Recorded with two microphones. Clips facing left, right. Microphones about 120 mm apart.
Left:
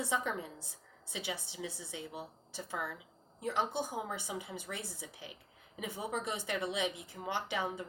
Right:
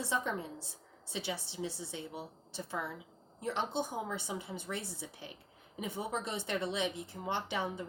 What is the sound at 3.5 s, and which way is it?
Speech, 60° right (ahead or behind).